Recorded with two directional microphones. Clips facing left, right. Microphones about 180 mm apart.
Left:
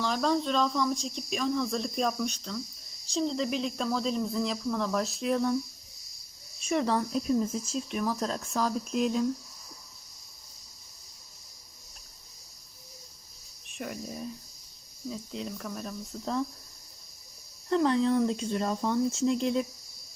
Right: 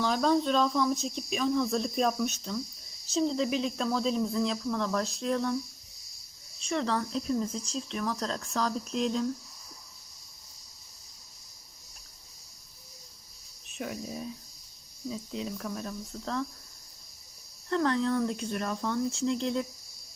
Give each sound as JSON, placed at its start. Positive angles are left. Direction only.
{"t": 0.0, "sound": "speech", "side_deg": 0}
{"t": 6.7, "sound": "speech", "side_deg": 15}
{"t": 13.7, "sound": "speech", "side_deg": 0}
{"t": 17.7, "sound": "speech", "side_deg": 5}
{"t": 19.2, "sound": "speech", "side_deg": 10}